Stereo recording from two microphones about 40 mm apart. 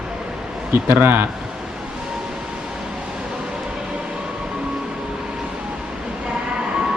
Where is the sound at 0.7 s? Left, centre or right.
Right.